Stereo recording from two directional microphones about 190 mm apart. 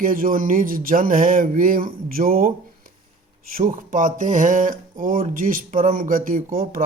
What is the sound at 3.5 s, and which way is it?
Speech, 45° right (ahead or behind).